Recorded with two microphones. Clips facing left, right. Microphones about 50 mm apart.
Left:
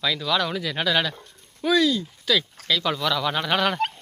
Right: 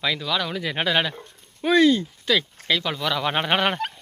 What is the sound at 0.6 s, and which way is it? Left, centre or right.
Speech, right.